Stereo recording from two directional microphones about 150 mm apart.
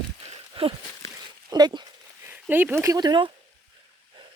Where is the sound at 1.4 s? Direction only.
25° right (ahead or behind).